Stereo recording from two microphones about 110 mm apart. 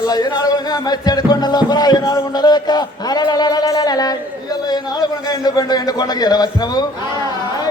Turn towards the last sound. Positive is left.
turn(degrees=40)  # may be behind; listen again after turning